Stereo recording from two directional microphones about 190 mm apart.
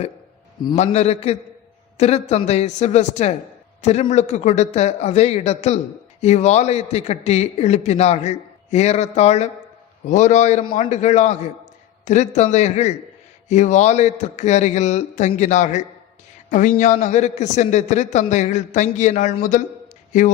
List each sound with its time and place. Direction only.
0.8 s a man's voice: 35° left (ahead or behind)